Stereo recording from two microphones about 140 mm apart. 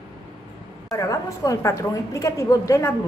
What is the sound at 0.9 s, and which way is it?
A woman's voice, 25° left (ahead or behind).